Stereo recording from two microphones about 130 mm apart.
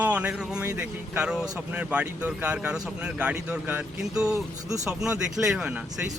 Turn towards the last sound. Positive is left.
turn(degrees=-10)  # may be behind; listen again after turning